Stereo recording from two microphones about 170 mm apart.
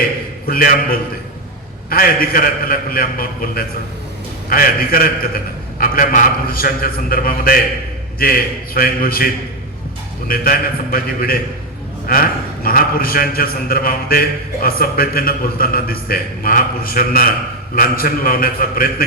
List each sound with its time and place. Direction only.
0.4 s a man's voice: 60° left (ahead or behind)